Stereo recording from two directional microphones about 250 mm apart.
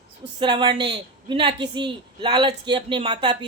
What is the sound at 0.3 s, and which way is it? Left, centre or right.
A man's voice, centre.